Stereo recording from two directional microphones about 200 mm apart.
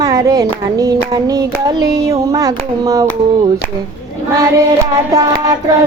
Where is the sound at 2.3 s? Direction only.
20° right (ahead or behind).